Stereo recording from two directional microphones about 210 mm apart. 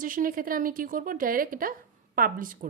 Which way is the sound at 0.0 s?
40° right (ahead or behind).